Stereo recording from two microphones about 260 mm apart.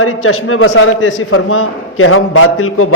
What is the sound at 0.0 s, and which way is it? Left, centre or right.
A man's voice, left.